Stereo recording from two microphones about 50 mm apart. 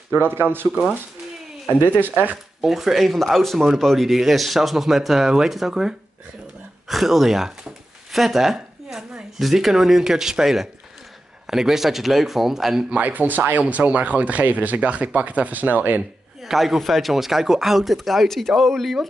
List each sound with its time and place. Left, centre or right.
0.1 s speech: right
2.0 s speech: right
2.6 s speech: centre
12.9 s speech: right
16.3 s speech: centre